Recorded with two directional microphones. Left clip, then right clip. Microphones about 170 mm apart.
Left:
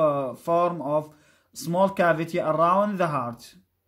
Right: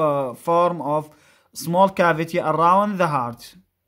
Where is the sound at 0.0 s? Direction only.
35° right (ahead or behind).